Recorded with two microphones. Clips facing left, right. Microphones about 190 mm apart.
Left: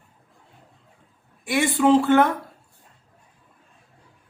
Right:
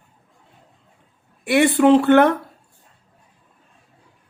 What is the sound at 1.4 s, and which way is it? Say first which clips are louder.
Speech: right 5 dB; 65° right (ahead or behind).